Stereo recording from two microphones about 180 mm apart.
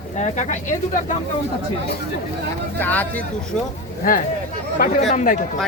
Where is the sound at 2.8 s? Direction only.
10° left (ahead or behind).